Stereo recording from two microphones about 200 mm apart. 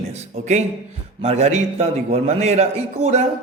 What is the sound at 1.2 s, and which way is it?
Speech, 30° right (ahead or behind).